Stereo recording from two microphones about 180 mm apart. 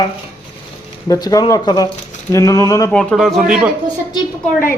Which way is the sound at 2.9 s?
Centre (ahead or behind).